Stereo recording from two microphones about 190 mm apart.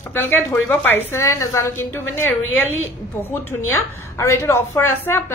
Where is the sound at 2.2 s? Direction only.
90° left.